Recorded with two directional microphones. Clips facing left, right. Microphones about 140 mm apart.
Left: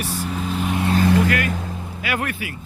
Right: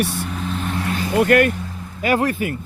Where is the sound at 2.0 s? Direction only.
35° right (ahead or behind).